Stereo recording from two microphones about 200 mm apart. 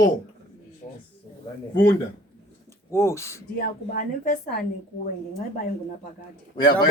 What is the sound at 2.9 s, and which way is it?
Speech, 15° left (ahead or behind).